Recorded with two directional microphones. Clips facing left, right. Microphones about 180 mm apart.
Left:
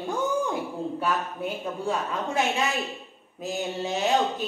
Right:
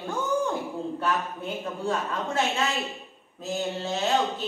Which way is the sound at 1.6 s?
15° left (ahead or behind).